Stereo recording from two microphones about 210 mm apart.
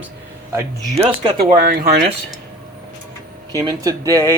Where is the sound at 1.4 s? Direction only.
45° right (ahead or behind).